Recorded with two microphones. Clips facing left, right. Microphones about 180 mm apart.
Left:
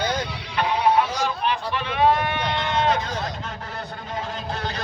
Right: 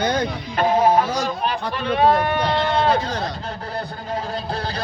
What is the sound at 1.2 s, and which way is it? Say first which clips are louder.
A man's voice: right 1 dB; 40° right (ahead or behind).